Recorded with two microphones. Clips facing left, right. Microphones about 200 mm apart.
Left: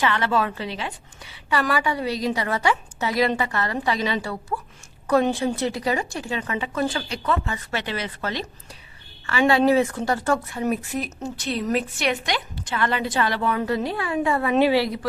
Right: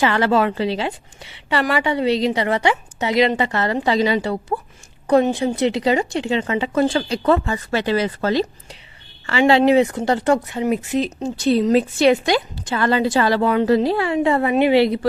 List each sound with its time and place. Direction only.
0.0 s a woman's voice: 30° right (ahead or behind)
5.8 s a woman's voice: 20° right (ahead or behind)